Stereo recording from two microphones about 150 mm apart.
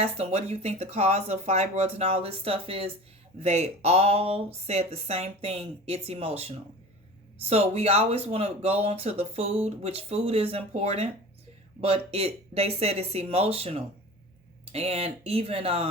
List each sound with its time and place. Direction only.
0.0 s speech: 45° right (ahead or behind)